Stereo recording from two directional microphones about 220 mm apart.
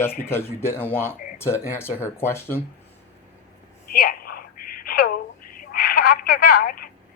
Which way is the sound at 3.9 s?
45° left (ahead or behind).